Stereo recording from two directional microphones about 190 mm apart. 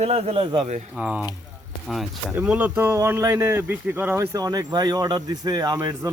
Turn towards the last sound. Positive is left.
turn(degrees=-20)  # may be behind; listen again after turning